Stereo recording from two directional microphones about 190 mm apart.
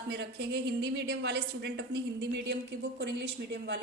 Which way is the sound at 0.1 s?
65° right (ahead or behind).